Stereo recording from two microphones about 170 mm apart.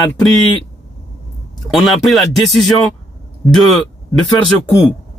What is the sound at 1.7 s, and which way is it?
Speech, centre (ahead or behind).